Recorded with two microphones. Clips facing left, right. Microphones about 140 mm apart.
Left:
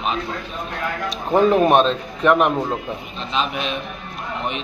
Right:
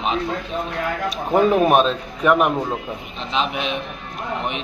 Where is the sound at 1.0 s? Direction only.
5° right (ahead or behind).